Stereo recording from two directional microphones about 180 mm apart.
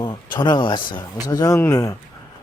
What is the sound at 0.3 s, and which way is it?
Speech, 25° left (ahead or behind).